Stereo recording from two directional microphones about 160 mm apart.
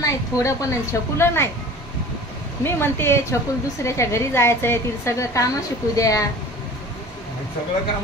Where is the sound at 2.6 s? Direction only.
15° left (ahead or behind).